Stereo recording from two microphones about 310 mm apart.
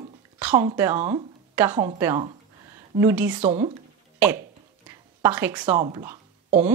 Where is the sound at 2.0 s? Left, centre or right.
Centre.